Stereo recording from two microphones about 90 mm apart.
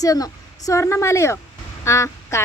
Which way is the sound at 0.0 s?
40° left (ahead or behind).